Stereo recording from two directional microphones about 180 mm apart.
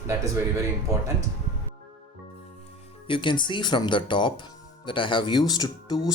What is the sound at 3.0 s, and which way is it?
Speech, 25° left (ahead or behind).